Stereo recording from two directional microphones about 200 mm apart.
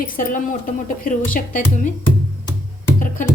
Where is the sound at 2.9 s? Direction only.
40° left (ahead or behind).